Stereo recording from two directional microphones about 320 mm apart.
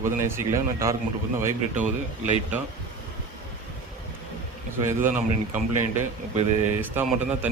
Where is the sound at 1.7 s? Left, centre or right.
Right.